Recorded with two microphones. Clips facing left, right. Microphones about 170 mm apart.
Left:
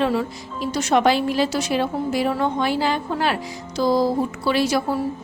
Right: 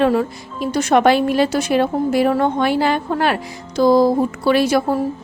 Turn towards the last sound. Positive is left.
turn(degrees=-55)  # may be behind; listen again after turning